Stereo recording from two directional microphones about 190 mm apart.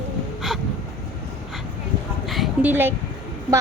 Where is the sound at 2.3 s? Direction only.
Centre (ahead or behind).